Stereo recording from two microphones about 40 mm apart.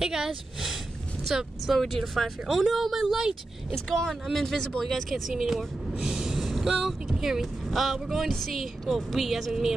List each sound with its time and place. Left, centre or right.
0.0 s speech: centre
3.7 s speech: centre
5.3 s speech: centre
5.9 s snort: centre
6.4 s vehicle: centre
7.2 s speech: centre
8.3 s speech: centre